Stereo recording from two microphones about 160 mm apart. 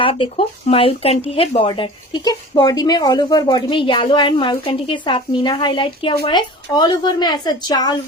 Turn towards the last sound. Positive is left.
turn(degrees=25)  # may be behind; listen again after turning